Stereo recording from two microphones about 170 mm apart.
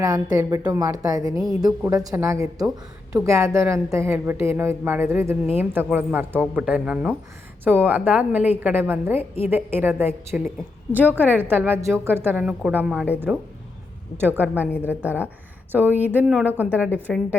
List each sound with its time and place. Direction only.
0.0 s a woman's voice: 20° right (ahead or behind)